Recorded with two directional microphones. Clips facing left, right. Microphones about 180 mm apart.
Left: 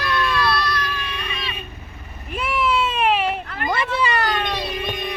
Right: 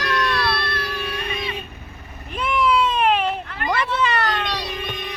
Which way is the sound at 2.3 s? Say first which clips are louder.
Right 2 dB; 5° left (ahead or behind).